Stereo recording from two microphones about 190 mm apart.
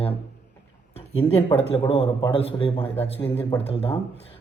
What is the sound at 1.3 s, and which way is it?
A man's voice, 30° left (ahead or behind).